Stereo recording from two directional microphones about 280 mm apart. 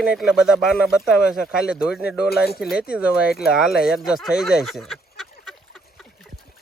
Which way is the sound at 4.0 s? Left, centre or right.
Centre.